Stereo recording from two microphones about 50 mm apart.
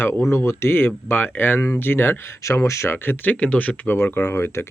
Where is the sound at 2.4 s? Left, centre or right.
Left.